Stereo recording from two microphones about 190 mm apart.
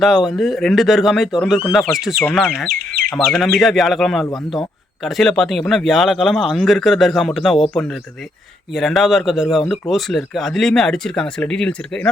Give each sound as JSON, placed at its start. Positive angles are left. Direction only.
{"t": 0.0, "sound": "speech", "side_deg": 0}
{"t": 2.6, "sound": "speech", "side_deg": -50}
{"t": 3.2, "sound": "speech", "side_deg": 0}
{"t": 8.7, "sound": "speech", "side_deg": 0}